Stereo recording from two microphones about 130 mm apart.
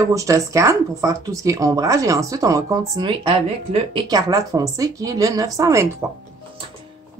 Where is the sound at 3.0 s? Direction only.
45° right (ahead or behind).